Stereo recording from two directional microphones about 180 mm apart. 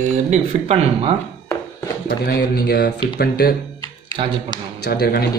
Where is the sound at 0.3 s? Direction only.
35° right (ahead or behind).